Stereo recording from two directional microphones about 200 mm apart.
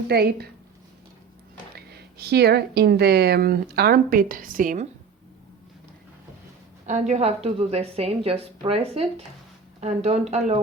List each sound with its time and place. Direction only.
0.1 s speech: 55° right (ahead or behind)
1.7 s speech: 55° right (ahead or behind)
6.8 s a woman's voice: 35° right (ahead or behind)